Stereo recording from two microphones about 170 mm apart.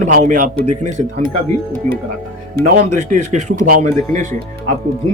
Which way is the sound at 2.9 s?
45° right (ahead or behind).